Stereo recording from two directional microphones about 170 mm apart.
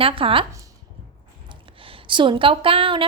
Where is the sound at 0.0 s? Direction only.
30° right (ahead or behind).